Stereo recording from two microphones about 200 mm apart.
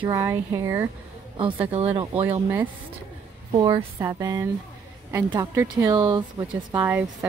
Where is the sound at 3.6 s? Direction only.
25° right (ahead or behind).